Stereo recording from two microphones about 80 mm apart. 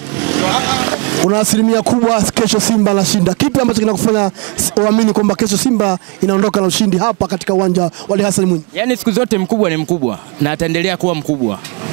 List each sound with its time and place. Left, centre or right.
0.2 s vehicle: centre
2.0 s speech: centre